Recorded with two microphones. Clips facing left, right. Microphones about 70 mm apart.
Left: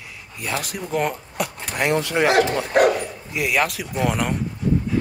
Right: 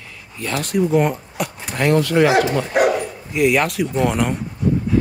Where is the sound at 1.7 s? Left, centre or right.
Centre.